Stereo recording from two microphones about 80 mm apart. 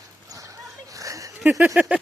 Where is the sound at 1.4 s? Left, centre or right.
Centre.